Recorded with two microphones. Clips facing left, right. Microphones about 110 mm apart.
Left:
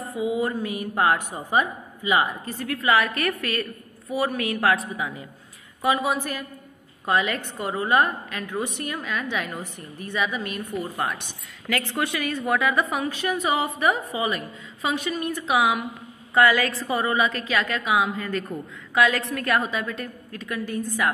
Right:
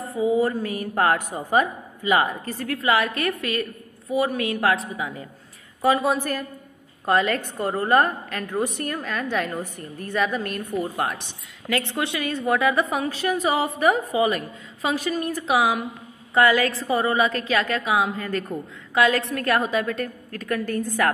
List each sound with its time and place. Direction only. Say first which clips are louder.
0.2 s a woman's voice: right 4 dB; 35° right (ahead or behind)
7.1 s a woman's voice: right 3 dB; 50° right (ahead or behind)
11.6 s a woman's voice: right 1 dB; 25° right (ahead or behind); by 21.1 s 45° right (ahead or behind)